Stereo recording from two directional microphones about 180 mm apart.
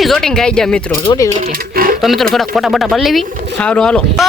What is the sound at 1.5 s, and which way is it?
Sewing machine, 55° right (ahead or behind).